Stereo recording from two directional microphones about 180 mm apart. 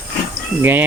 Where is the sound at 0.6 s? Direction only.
10° right (ahead or behind).